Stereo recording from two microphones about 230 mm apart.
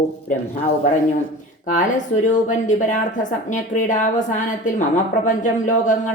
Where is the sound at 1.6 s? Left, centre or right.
Left.